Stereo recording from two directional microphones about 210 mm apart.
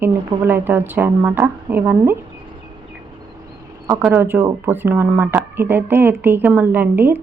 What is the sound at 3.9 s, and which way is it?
Speech, 10° right (ahead or behind).